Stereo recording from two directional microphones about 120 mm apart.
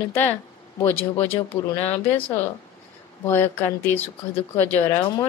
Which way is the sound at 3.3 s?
20° left (ahead or behind).